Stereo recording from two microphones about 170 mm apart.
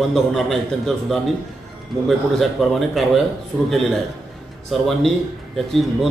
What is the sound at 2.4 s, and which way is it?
Speech, centre (ahead or behind).